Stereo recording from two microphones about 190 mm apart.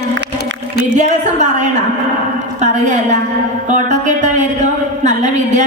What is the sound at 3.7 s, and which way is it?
Music, 40° right (ahead or behind).